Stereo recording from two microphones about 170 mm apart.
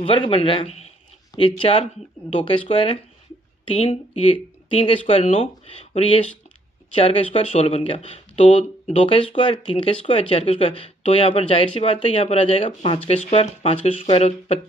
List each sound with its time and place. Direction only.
0.0 s speech: 30° left (ahead or behind)